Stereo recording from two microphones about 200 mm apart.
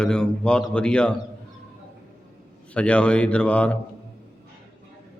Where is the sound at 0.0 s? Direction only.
5° left (ahead or behind).